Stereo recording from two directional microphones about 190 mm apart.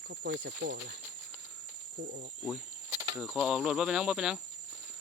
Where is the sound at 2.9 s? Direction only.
20° right (ahead or behind).